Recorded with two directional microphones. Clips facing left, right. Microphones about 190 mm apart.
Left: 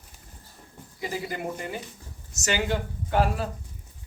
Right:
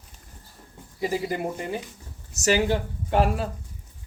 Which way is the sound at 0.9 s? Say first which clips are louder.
Right 5 dB; 30° right (ahead or behind).